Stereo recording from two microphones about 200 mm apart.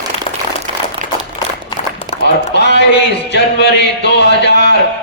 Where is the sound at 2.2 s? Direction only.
60° left (ahead or behind).